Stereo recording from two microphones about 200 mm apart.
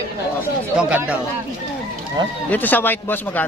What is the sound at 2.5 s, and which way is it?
Speech, 10° left (ahead or behind).